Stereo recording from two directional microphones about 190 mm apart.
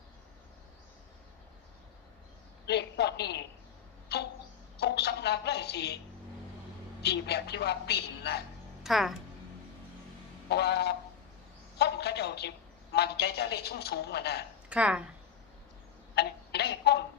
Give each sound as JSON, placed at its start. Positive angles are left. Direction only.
{"t": 2.6, "sound": "a sound", "side_deg": 60}
{"t": 7.0, "sound": "a woman's voice", "side_deg": 60}
{"t": 8.8, "sound": "speech", "side_deg": 0}
{"t": 10.5, "sound": "a woman's voice", "side_deg": 60}
{"t": 14.7, "sound": "speech", "side_deg": -5}
{"t": 16.1, "sound": "a sound", "side_deg": 60}